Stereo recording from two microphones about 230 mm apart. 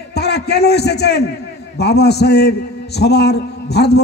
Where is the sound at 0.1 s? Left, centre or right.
Left.